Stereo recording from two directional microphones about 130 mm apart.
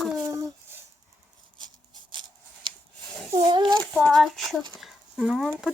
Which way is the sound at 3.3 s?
35° right (ahead or behind).